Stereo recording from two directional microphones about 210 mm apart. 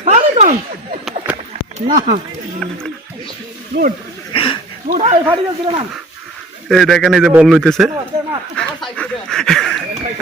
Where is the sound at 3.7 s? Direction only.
50° right (ahead or behind).